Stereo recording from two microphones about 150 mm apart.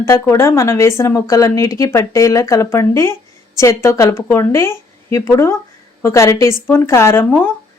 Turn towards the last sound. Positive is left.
turn(degrees=15)  # may be behind; listen again after turning